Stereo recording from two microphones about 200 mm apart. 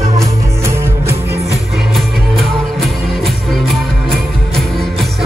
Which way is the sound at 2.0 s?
Centre (ahead or behind).